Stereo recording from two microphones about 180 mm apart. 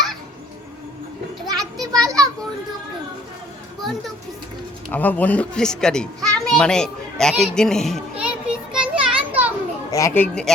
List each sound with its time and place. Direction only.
1.5 s children playing: 20° right (ahead or behind)
4.9 s a child's voice: 10° left (ahead or behind)
8.2 s children playing: 5° right (ahead or behind)
9.9 s a child's voice: 15° left (ahead or behind)